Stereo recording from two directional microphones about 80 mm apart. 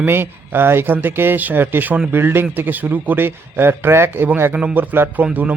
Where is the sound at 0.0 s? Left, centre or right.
Right.